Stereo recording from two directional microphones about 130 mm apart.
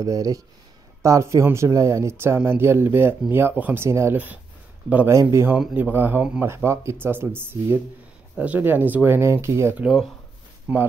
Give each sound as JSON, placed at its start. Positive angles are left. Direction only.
{"t": 0.0, "sound": "speech", "side_deg": -25}
{"t": 9.8, "sound": "speech", "side_deg": -5}
{"t": 10.7, "sound": "speech", "side_deg": -15}